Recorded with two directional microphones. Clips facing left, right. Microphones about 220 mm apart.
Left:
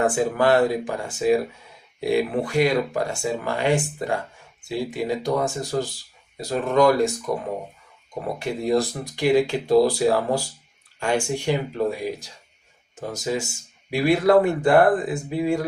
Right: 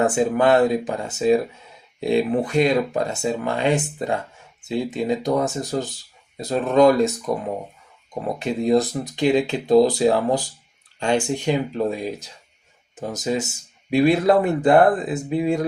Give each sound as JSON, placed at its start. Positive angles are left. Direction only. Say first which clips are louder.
{"t": 0.0, "sound": "speech", "louder": "right 2 dB", "side_deg": -20}
{"t": 8.4, "sound": "speech", "louder": "right 3 dB", "side_deg": -20}